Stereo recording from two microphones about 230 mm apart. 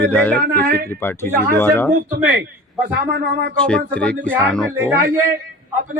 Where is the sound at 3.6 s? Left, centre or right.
Centre.